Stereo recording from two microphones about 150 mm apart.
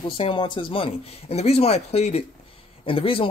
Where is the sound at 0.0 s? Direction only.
35° left (ahead or behind).